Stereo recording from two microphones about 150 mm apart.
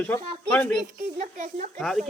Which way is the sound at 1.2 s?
55° right (ahead or behind).